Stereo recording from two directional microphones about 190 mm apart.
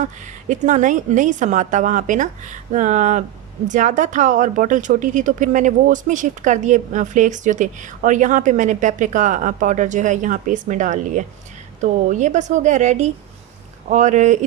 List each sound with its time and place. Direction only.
0.0 s speech: 40° right (ahead or behind)